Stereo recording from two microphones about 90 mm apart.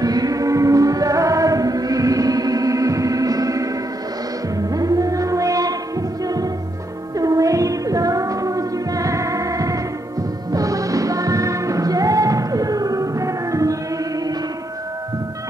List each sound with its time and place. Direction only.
0.0 s choir: 45° right (ahead or behind)
4.6 s music: 40° right (ahead or behind)
7.2 s music: 40° right (ahead or behind)